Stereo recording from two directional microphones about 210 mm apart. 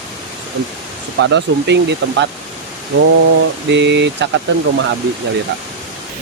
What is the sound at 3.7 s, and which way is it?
Speech, 55° right (ahead or behind).